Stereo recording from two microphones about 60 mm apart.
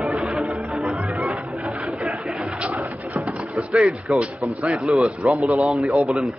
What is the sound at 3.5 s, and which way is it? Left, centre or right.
Speech, centre.